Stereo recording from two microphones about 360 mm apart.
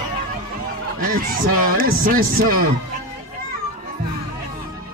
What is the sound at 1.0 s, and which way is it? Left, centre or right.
Speech, right.